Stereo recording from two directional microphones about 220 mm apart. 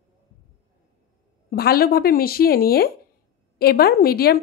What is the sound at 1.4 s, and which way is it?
A woman's voice, 45° left (ahead or behind).